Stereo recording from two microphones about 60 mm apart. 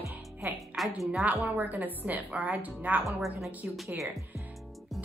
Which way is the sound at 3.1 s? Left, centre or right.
Centre.